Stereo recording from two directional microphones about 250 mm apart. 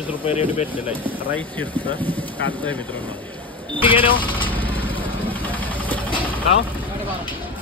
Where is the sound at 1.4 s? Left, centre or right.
Centre.